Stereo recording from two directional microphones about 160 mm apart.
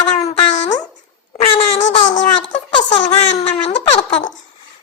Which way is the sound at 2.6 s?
30° left (ahead or behind).